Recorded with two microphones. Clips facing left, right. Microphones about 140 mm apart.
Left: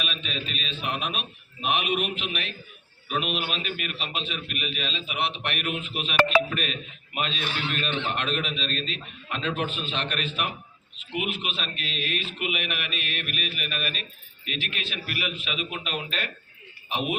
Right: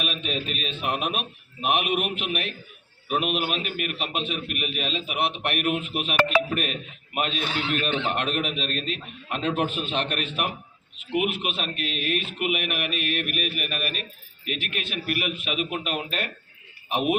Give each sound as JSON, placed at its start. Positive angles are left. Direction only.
{"t": 0.0, "sound": "a man's voice", "side_deg": -50}